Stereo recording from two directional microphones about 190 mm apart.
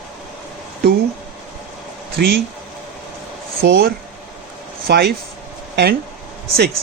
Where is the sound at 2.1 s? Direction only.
55° right (ahead or behind).